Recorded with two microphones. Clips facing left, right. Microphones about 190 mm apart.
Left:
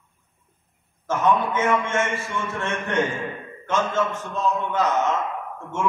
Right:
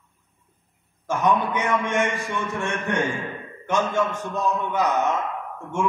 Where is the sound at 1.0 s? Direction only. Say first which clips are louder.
Left 1 dB; 15° right (ahead or behind).